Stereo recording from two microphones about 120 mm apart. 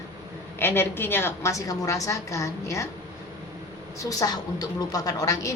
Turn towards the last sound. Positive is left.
turn(degrees=30)  # may be behind; listen again after turning